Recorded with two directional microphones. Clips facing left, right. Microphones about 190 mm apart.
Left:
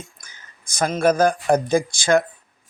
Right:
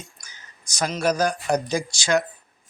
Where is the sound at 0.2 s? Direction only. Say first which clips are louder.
Left 1 dB; 55° left (ahead or behind).